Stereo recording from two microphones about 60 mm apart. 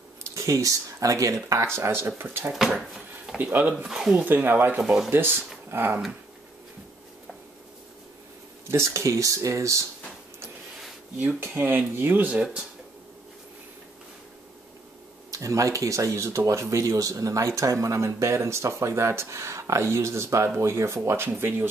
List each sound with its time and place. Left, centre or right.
0.3 s speech: right
1.8 s speech: right
3.7 s speech: centre
4.2 s speech: right
4.8 s speech: centre
5.1 s speech: right
8.6 s speech: right
11.1 s speech: right
15.3 s speech: right